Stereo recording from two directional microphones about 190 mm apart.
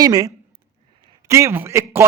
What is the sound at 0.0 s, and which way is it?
Speech, 20° right (ahead or behind).